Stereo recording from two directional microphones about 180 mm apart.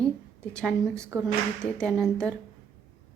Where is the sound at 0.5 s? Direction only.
5° left (ahead or behind).